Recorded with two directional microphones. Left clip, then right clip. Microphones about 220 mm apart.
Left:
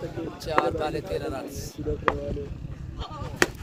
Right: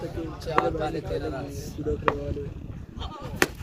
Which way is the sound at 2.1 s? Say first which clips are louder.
Even; centre (ahead or behind).